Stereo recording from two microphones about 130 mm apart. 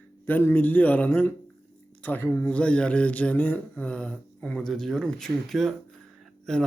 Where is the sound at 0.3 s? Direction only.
15° left (ahead or behind).